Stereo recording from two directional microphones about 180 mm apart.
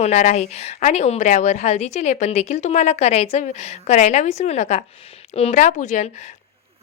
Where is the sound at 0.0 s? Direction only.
40° left (ahead or behind).